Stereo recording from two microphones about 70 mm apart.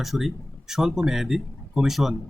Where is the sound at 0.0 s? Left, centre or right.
Centre.